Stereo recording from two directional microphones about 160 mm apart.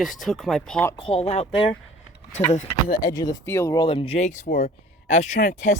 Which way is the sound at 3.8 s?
35° left (ahead or behind).